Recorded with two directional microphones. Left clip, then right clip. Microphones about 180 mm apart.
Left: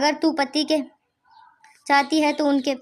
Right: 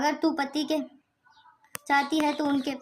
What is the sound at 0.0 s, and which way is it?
A woman's voice, 40° left (ahead or behind).